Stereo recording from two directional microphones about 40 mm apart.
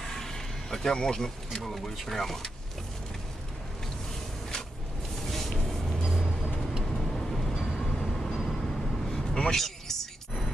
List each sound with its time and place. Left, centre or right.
0.0 s vehicle: centre
1.0 s speech: centre
1.6 s speech: centre
5.3 s music: centre
6.1 s vehicle: centre
7.5 s train: centre
7.9 s vehicle: centre
9.3 s a sound: centre